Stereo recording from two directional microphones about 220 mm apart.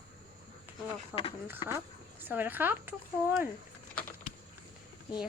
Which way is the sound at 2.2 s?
10° right (ahead or behind).